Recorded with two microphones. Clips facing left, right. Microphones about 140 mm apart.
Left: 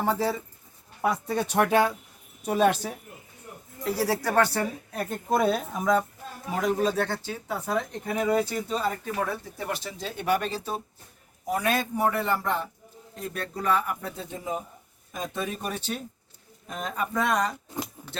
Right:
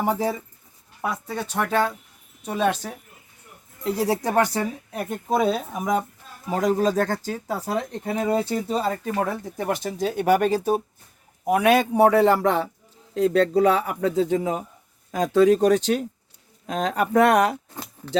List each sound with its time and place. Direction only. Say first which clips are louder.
0.0 s speech: right 2 dB; 15° right (ahead or behind)
1.0 s speech: left 2 dB; 15° left (ahead or behind)
3.8 s speech: right 3 dB; 20° right (ahead or behind); by 5.8 s 5° right (ahead or behind)
5.8 s speech: left 1 dB; 20° right (ahead or behind)
6.5 s speech: right 4 dB; 40° right (ahead or behind)
9.6 s speech: right 8 dB; 50° right (ahead or behind)
11.4 s a man's voice: right 8 dB; 65° right (ahead or behind)
18.0 s keys jangling: right 5 dB; 10° left (ahead or behind)